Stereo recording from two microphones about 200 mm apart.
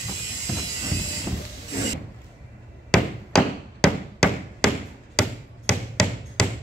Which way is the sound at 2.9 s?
Centre (ahead or behind).